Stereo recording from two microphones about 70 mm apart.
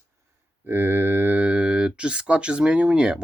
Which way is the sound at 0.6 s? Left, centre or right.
Right.